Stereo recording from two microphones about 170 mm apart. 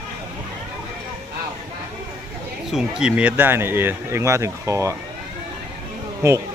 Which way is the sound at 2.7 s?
5° right (ahead or behind).